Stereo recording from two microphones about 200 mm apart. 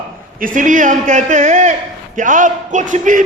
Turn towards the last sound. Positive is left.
turn(degrees=-40)  # may be behind; listen again after turning